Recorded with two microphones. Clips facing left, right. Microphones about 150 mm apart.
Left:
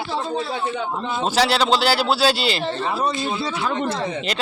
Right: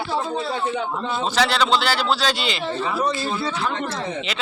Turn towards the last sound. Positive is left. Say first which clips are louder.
# even
turn(degrees=20)  # may be behind; listen again after turning